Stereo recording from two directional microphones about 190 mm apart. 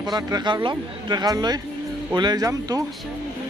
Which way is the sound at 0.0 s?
20° right (ahead or behind).